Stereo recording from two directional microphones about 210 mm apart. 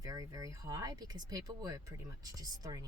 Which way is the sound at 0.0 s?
15° right (ahead or behind).